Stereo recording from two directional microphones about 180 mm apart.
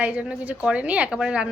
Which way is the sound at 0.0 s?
5° right (ahead or behind).